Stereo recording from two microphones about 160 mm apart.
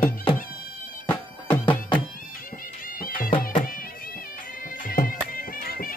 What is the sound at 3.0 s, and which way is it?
Music, 60° left (ahead or behind).